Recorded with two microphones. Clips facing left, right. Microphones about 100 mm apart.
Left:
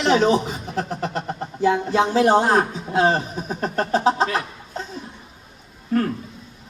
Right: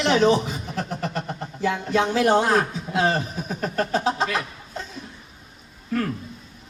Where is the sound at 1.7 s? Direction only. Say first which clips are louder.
Left 3 dB; 25° left (ahead or behind).